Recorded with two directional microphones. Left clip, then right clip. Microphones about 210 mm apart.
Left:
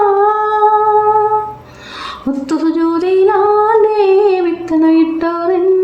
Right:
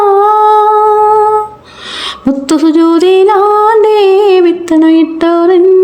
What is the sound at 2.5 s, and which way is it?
Singing, 35° right (ahead or behind).